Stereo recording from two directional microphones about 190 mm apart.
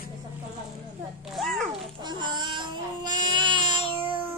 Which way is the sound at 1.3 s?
Centre (ahead or behind).